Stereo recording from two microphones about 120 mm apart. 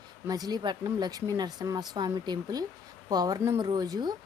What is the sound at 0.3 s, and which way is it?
Speech, 35° right (ahead or behind).